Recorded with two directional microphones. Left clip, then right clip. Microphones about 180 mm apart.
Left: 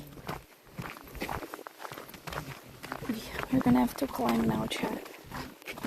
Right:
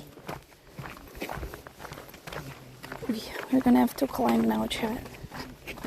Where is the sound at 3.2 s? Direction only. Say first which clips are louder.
Right 3 dB; 30° right (ahead or behind).